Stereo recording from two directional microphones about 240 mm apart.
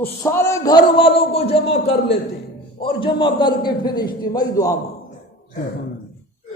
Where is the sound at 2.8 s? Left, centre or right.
Left.